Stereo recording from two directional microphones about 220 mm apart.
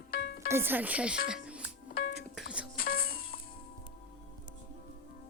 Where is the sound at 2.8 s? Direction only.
40° left (ahead or behind).